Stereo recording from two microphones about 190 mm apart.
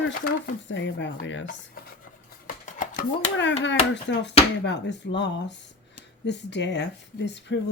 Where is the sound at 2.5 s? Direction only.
45° left (ahead or behind).